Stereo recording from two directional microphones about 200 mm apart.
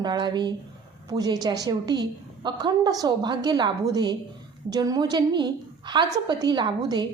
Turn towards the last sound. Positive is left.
turn(degrees=-20)  # may be behind; listen again after turning